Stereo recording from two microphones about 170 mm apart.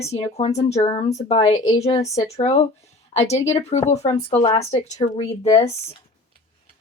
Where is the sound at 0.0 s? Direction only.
40° left (ahead or behind).